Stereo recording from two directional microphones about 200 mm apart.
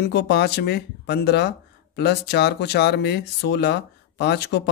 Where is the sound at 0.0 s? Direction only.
55° left (ahead or behind).